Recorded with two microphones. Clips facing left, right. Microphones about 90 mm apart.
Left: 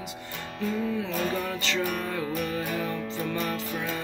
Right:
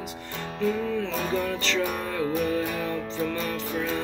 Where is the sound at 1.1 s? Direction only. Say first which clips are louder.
Right 1 dB; 25° right (ahead or behind).